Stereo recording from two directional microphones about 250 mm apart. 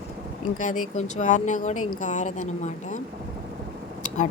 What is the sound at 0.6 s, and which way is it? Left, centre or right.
Speech, left.